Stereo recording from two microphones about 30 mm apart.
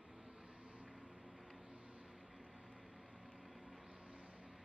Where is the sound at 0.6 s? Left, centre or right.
Right.